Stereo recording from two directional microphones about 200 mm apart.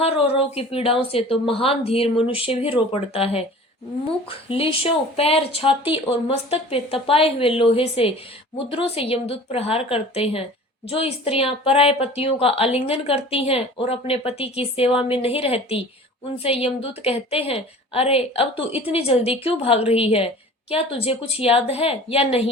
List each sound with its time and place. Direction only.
0.0 s a woman's voice: 30° left (ahead or behind)